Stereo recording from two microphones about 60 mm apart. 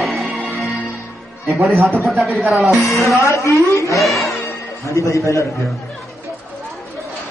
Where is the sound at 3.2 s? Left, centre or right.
Left.